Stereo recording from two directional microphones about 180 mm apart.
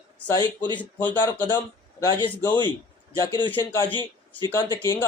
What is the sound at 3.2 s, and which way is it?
A man's voice, 20° left (ahead or behind).